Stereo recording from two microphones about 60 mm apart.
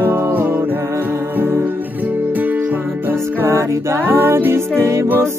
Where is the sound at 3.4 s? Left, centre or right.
Right.